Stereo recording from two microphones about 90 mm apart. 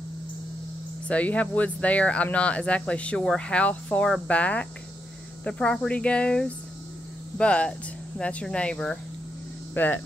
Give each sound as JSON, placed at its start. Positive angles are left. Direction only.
{"t": 1.0, "sound": "speech", "side_deg": 15}
{"t": 9.8, "sound": "speech", "side_deg": 20}